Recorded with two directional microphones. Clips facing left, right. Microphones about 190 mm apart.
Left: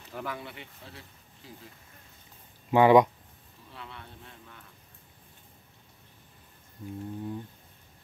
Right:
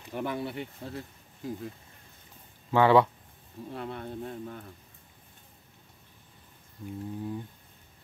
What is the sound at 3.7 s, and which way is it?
Speech, 45° right (ahead or behind).